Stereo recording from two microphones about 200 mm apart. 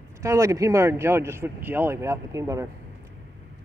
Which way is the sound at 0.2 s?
15° right (ahead or behind).